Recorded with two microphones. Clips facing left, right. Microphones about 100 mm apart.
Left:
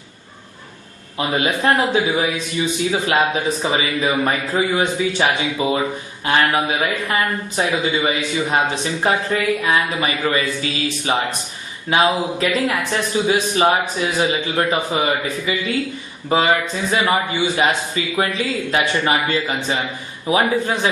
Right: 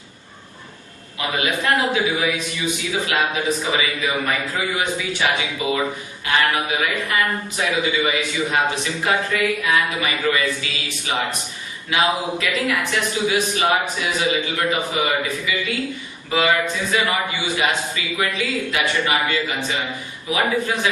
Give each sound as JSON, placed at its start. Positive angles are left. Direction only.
{"t": 1.2, "sound": "a man's voice", "side_deg": 30}